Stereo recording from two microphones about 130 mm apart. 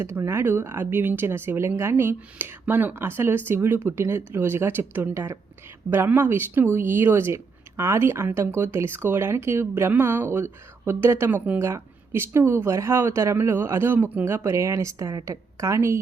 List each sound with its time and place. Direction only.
0.0 s speech: 20° right (ahead or behind)